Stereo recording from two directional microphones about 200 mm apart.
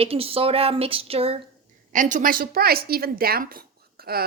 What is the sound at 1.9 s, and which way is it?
A woman's voice, 40° right (ahead or behind).